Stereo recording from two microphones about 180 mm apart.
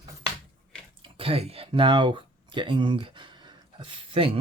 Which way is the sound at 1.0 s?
30° right (ahead or behind).